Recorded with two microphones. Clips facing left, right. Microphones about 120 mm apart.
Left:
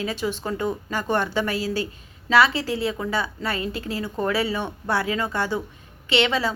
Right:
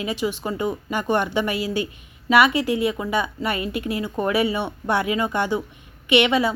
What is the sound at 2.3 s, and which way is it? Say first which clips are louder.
Speech: right 2 dB; 15° right (ahead or behind).